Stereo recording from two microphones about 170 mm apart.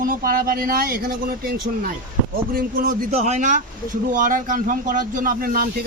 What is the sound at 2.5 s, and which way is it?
Speech, 55° right (ahead or behind).